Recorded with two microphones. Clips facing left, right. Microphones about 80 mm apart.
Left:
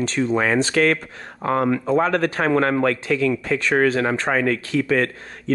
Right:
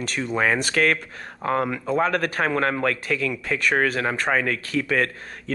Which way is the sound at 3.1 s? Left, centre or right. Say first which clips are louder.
Left 5 dB; left.